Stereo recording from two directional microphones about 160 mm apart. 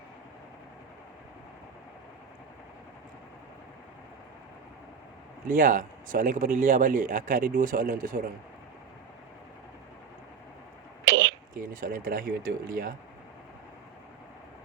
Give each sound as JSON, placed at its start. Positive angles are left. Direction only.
{"t": 5.5, "sound": "speech", "side_deg": -55}
{"t": 11.0, "sound": "a sound", "side_deg": -90}
{"t": 11.5, "sound": "speech", "side_deg": -55}